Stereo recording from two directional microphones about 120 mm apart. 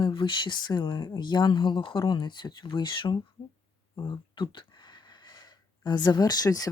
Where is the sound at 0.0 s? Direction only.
45° left (ahead or behind).